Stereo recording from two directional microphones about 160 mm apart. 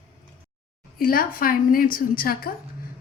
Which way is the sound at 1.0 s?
65° left (ahead or behind).